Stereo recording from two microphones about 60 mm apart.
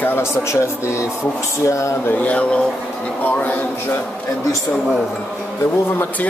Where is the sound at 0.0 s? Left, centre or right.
Left.